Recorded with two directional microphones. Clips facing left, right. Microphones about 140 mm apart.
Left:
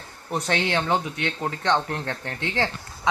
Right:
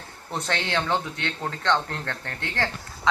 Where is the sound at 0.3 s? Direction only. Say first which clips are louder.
Left 4 dB; 15° left (ahead or behind).